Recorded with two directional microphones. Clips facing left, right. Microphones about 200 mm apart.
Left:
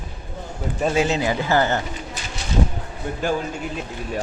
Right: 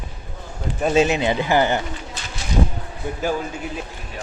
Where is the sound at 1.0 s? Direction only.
20° right (ahead or behind).